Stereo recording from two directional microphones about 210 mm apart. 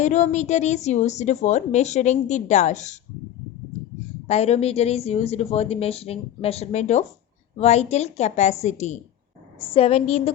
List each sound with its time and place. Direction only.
0.0 s a woman's voice: 35° left (ahead or behind)
4.3 s a woman's voice: 30° left (ahead or behind)